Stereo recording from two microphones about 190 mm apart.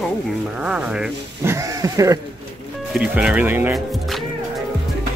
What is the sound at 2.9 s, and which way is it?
Speech, 5° right (ahead or behind).